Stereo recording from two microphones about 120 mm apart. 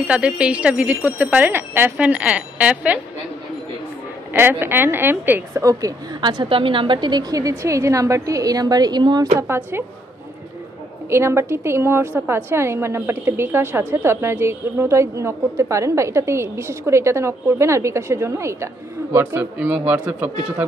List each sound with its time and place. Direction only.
0.1 s speech: 10° right (ahead or behind)
4.3 s speech: 15° right (ahead or behind)
5.6 s a woman's voice: 30° right (ahead or behind)
9.4 s a woman's voice: 20° right (ahead or behind)
11.1 s a woman's voice: 20° right (ahead or behind)
19.1 s speech: 15° right (ahead or behind)